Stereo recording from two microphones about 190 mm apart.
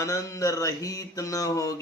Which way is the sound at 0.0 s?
15° left (ahead or behind).